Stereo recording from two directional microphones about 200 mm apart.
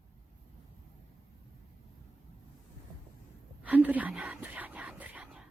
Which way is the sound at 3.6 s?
10° right (ahead or behind).